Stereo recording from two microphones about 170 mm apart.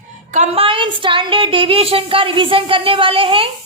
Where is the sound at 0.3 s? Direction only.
40° right (ahead or behind).